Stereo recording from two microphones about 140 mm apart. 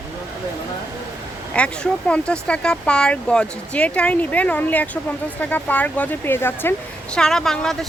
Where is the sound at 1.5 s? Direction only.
10° left (ahead or behind).